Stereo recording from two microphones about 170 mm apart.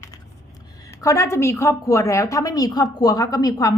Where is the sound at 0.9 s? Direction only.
15° left (ahead or behind).